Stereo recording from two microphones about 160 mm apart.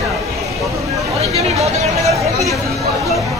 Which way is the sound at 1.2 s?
40° right (ahead or behind).